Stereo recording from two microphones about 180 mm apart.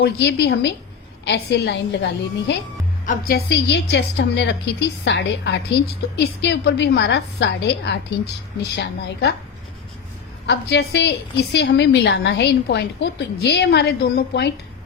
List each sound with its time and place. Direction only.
0.0 s a woman's voice: 70° left (ahead or behind)
3.1 s a woman's voice: 60° left (ahead or behind)
10.4 s a woman's voice: 70° left (ahead or behind)